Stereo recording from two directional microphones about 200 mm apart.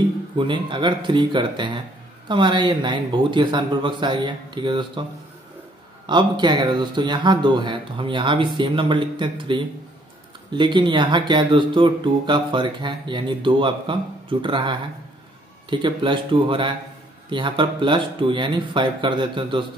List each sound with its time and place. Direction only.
0.4 s speech: 25° right (ahead or behind)
6.0 s speech: 20° right (ahead or behind)